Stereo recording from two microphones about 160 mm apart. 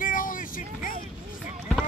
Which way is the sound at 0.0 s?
60° left (ahead or behind).